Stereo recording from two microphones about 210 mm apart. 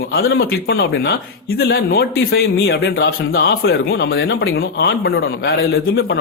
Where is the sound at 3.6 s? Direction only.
70° left (ahead or behind).